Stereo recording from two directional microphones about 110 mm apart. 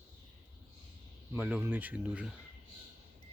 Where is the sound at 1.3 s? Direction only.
15° right (ahead or behind).